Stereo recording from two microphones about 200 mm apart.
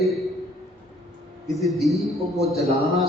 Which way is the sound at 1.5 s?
Centre (ahead or behind).